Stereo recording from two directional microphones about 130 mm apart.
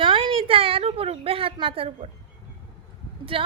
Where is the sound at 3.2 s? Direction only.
45° right (ahead or behind).